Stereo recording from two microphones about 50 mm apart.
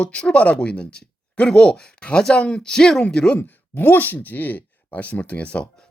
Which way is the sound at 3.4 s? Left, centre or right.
Left.